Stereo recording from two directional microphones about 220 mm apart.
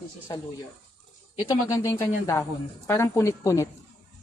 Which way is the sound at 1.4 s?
15° left (ahead or behind).